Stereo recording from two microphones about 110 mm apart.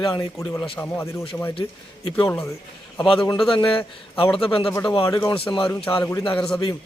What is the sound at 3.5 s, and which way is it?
A man's voice, 50° left (ahead or behind).